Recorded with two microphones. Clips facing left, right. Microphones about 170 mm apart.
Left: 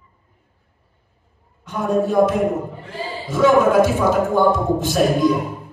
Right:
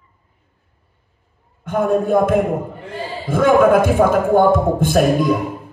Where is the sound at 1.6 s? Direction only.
55° right (ahead or behind).